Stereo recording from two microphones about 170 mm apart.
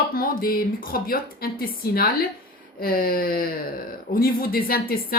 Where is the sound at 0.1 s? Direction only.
60° left (ahead or behind).